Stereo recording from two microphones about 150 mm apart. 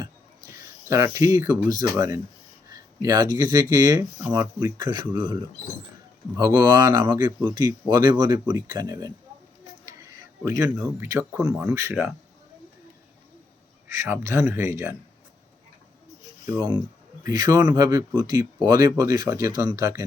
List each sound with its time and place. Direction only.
0.0 s a sound: 20° right (ahead or behind)
2.6 s speech: 25° right (ahead or behind)
10.4 s speech: 20° right (ahead or behind)
13.8 s speech: 20° right (ahead or behind)
16.5 s speech: 30° right (ahead or behind)